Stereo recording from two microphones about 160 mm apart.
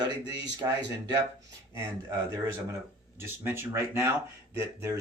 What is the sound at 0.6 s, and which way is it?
Speech, 20° right (ahead or behind).